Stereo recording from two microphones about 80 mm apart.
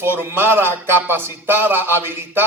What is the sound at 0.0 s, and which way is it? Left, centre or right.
A man's voice, right.